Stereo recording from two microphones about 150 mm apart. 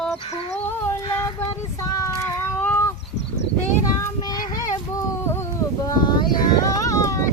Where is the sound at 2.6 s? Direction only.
15° left (ahead or behind).